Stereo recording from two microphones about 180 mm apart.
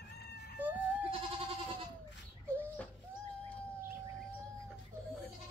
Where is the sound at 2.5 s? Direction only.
10° left (ahead or behind).